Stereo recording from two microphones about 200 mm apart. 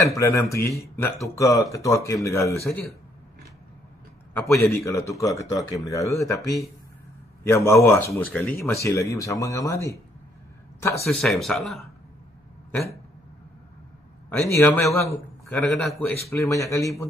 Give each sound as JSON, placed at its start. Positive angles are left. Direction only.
{"t": 0.0, "sound": "speech", "side_deg": 15}
{"t": 4.3, "sound": "a man's voice", "side_deg": 10}
{"t": 7.4, "sound": "speech", "side_deg": 15}
{"t": 11.1, "sound": "speech", "side_deg": 0}
{"t": 14.5, "sound": "speech", "side_deg": 15}